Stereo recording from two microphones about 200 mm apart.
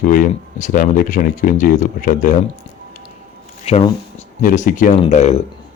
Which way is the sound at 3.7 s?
30° left (ahead or behind).